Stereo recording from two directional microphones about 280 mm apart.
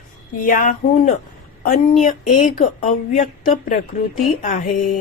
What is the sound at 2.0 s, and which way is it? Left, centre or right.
A woman's voice, left.